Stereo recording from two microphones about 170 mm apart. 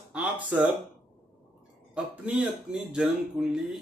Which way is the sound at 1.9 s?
5° right (ahead or behind).